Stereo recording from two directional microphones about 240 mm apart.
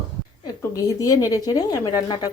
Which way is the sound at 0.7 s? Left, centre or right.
Centre.